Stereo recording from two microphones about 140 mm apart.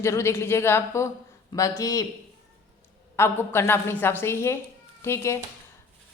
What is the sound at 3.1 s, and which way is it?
A woman's voice, 15° left (ahead or behind).